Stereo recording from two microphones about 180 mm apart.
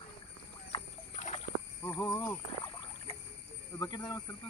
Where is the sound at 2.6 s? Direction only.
30° left (ahead or behind).